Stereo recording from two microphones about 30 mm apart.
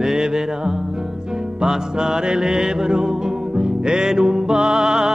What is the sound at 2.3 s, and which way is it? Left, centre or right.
Music, centre.